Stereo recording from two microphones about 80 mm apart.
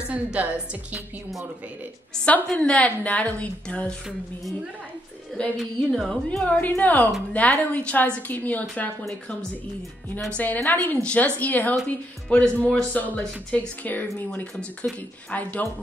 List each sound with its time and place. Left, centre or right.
0.1 s a woman's voice: centre
2.2 s a woman's voice: centre
5.6 s speech: centre
6.2 s a woman's voice: centre
10.3 s a woman's voice: left